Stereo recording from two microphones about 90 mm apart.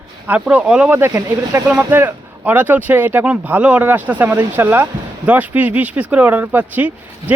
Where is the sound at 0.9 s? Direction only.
25° right (ahead or behind).